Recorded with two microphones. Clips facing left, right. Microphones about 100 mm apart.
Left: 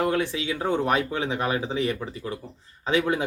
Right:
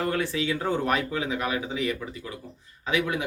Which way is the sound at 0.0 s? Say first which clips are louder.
Left 2 dB; 15° left (ahead or behind).